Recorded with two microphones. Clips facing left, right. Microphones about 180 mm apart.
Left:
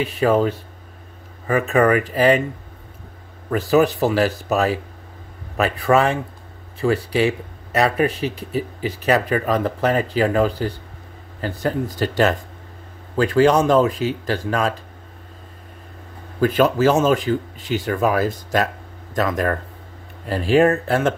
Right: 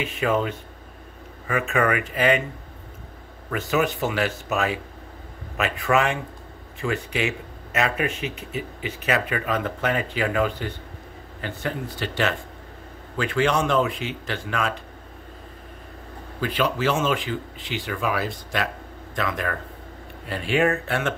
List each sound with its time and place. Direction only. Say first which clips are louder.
0.0 s speech: left 6 dB; 35° left (ahead or behind)
3.4 s speech: left 7 dB; 35° left (ahead or behind)
16.3 s speech: left 8 dB; 45° left (ahead or behind)